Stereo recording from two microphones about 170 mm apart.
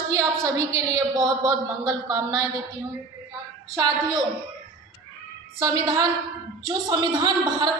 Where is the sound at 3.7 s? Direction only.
20° right (ahead or behind).